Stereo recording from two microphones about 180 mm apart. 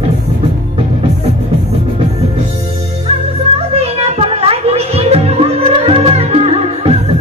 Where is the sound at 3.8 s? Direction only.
35° right (ahead or behind).